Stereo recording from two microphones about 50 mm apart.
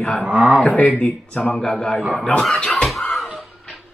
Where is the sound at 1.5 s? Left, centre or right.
Centre.